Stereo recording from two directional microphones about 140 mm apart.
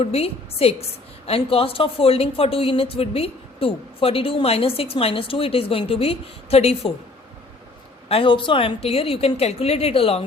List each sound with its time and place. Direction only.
0.0 s a woman's voice: 45° left (ahead or behind)
8.0 s a woman's voice: 40° left (ahead or behind)